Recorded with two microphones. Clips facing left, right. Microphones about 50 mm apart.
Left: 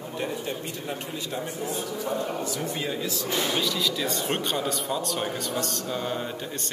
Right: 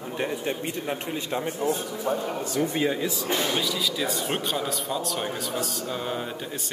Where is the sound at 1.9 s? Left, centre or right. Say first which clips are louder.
Right 1 dB; centre.